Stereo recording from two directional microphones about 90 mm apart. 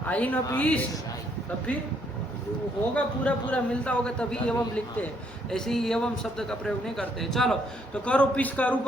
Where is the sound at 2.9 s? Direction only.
10° left (ahead or behind).